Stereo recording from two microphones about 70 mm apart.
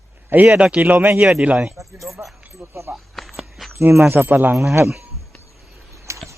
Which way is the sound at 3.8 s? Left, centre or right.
Right.